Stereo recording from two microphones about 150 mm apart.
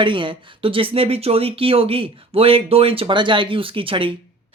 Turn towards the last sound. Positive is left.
turn(degrees=-35)  # may be behind; listen again after turning